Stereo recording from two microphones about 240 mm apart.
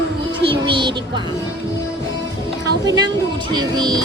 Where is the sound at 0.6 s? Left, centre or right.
Centre.